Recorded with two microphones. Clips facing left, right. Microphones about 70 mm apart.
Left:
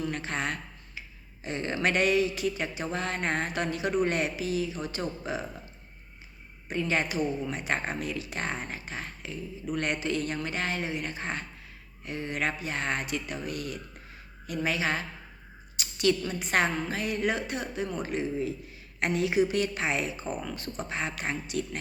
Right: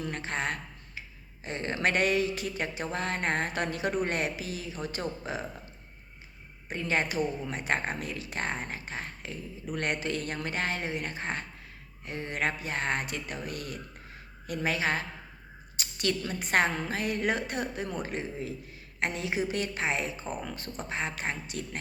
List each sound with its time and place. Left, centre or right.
0.1 s speech: right
6.7 s speech: right
15.8 s a sound: right
16.4 s speech: right
18.9 s a woman's voice: right
20.3 s speech: centre
20.9 s a woman's voice: right